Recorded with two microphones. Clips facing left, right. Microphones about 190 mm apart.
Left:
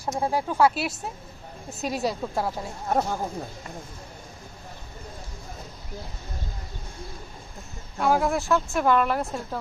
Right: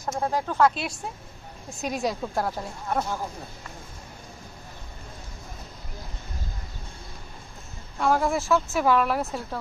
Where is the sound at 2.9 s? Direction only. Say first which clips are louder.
Left 3 dB; 40° left (ahead or behind).